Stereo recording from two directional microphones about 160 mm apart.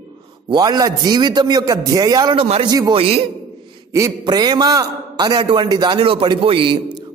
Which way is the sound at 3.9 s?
20° right (ahead or behind).